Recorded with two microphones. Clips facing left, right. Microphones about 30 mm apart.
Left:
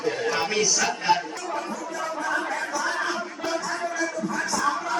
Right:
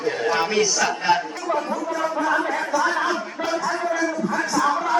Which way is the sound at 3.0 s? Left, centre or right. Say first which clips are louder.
Right 4 dB; centre.